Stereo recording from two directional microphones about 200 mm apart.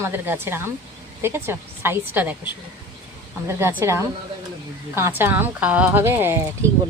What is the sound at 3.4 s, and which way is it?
Speech, 10° right (ahead or behind).